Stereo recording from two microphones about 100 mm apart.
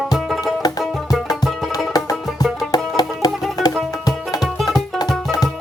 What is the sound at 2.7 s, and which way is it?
Music, 40° left (ahead or behind).